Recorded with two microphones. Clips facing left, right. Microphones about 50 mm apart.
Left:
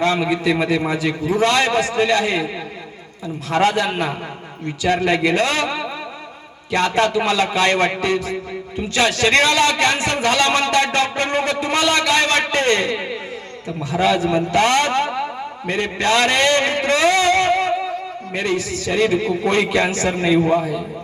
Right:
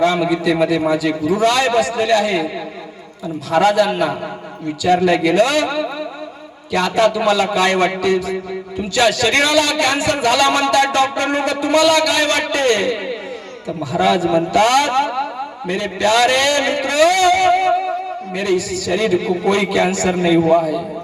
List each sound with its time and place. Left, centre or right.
0.0 s a man's voice: left
3.5 s a man's voice: left
14.2 s a man's voice: left